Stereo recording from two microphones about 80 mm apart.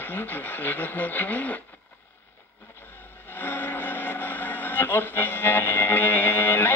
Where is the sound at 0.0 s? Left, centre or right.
Left.